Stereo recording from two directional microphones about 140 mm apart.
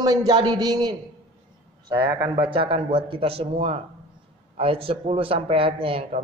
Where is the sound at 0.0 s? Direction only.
30° right (ahead or behind).